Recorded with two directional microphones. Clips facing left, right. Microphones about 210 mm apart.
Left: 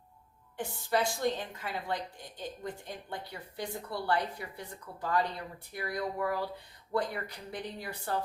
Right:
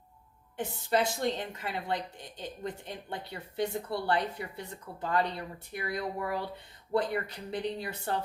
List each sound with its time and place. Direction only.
0.5 s a woman's voice: 20° right (ahead or behind)